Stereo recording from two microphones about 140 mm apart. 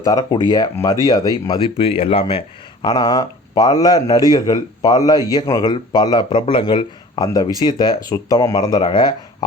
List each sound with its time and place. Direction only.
0.0 s speech: 25° left (ahead or behind)
1.5 s speech: 40° left (ahead or behind)
2.8 s speech: 30° left (ahead or behind)